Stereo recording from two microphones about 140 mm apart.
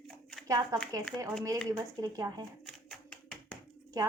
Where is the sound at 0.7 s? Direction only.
25° right (ahead or behind).